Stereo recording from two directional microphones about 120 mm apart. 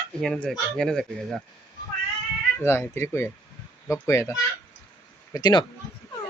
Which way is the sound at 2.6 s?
20° left (ahead or behind).